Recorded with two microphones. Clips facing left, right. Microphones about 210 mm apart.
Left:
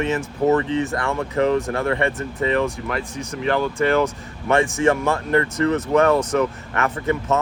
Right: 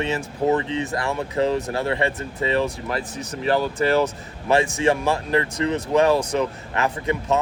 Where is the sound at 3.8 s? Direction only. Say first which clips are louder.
Left 1 dB; 35° right (ahead or behind).